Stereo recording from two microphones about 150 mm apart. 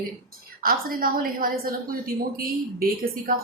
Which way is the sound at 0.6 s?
75° right (ahead or behind).